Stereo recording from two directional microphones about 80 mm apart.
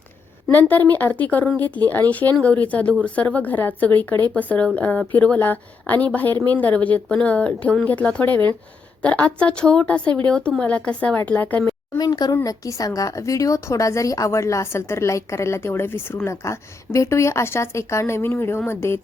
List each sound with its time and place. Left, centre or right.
0.5 s a woman's voice: left
11.9 s speech: left
12.3 s a woman's voice: left